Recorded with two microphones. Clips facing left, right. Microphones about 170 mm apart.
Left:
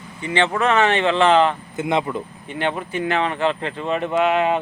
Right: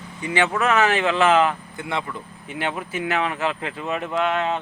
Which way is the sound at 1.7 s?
20° left (ahead or behind).